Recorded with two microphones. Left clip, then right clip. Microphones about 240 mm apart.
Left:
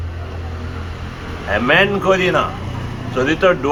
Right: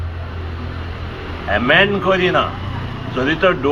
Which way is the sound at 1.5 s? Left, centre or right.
Left.